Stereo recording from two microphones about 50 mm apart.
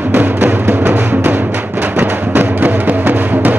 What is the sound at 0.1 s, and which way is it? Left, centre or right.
Music, right.